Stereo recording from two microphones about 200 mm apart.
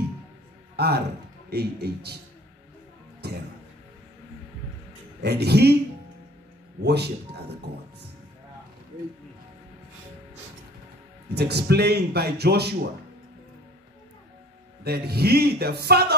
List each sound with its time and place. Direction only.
0.7 s a man's voice: 55° right (ahead or behind)
3.2 s music: 55° right (ahead or behind)
5.2 s a man's voice: 55° right (ahead or behind)
6.8 s a man's voice: 55° right (ahead or behind)
11.3 s a man's voice: 55° right (ahead or behind)
14.8 s a man's voice: 50° right (ahead or behind)